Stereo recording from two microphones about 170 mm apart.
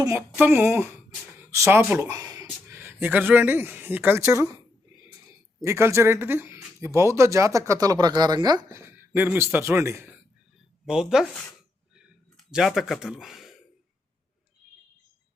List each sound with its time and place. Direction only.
0.2 s speech: 10° right (ahead or behind)
5.6 s speech: 15° right (ahead or behind)
10.8 s speech: 5° right (ahead or behind)